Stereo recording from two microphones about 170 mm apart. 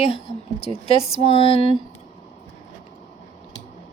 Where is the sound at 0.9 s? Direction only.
35° left (ahead or behind).